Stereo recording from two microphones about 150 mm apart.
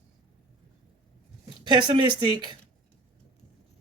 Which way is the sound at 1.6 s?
30° right (ahead or behind).